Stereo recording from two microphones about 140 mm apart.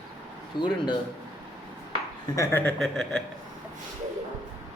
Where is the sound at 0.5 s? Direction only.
30° left (ahead or behind).